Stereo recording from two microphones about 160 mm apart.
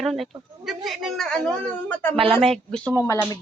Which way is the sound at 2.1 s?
35° right (ahead or behind).